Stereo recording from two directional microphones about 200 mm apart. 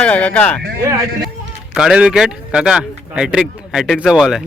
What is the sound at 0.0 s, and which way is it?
Speech, 5° left (ahead or behind).